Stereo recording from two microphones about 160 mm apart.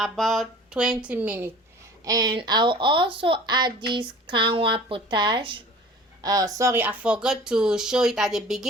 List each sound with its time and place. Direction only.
0.0 s speech: centre (ahead or behind)
2.0 s speech: 25° right (ahead or behind); by 8.6 s centre (ahead or behind)